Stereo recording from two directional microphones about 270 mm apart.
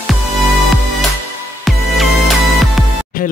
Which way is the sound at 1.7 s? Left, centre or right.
Centre.